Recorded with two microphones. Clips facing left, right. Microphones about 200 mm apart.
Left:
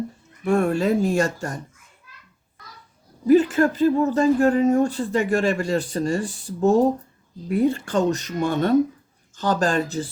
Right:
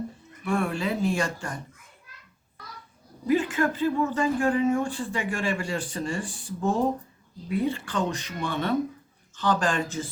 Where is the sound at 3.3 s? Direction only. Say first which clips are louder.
Left 8 dB; 40° left (ahead or behind).